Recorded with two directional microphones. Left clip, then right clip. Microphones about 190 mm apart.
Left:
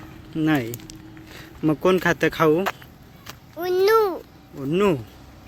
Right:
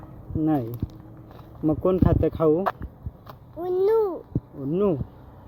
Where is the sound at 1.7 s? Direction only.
35° left (ahead or behind).